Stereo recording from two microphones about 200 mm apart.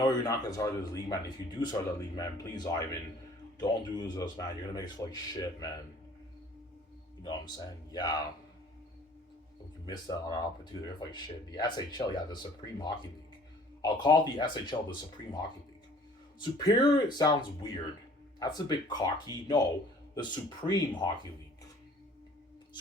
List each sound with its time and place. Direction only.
0.0 s speech: 20° left (ahead or behind)
7.2 s speech: 20° left (ahead or behind)
9.8 s speech: 20° left (ahead or behind)
13.8 s speech: 20° left (ahead or behind)
16.4 s speech: 20° left (ahead or behind)